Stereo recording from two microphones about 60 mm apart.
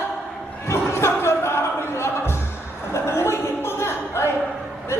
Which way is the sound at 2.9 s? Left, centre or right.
Left.